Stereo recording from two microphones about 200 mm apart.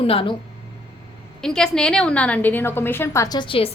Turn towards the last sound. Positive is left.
turn(degrees=25)  # may be behind; listen again after turning